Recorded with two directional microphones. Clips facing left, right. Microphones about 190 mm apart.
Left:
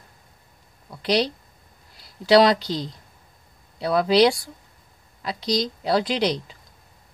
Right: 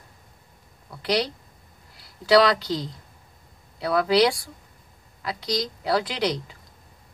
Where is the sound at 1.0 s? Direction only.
30° left (ahead or behind).